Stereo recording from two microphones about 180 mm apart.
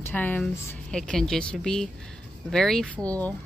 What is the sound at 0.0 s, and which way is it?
Speech, 10° left (ahead or behind).